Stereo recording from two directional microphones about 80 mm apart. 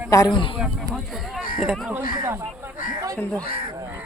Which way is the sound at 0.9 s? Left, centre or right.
Centre.